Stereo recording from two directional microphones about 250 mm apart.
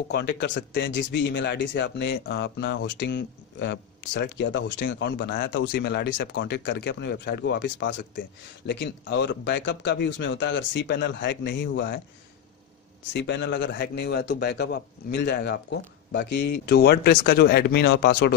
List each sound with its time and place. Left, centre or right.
0.1 s speech: left
13.1 s speech: left